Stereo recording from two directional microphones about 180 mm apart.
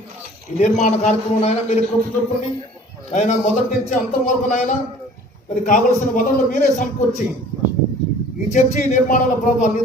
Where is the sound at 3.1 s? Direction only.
40° left (ahead or behind).